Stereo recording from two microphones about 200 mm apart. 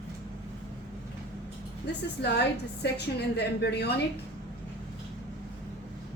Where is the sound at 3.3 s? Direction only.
55° left (ahead or behind).